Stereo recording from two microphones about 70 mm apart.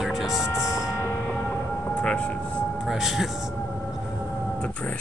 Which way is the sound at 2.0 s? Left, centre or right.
Centre.